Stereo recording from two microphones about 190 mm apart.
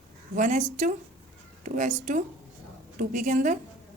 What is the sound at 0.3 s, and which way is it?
A woman's voice, 40° right (ahead or behind).